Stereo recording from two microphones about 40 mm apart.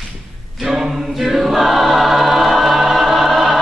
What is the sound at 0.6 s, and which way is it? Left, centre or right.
Choir, centre.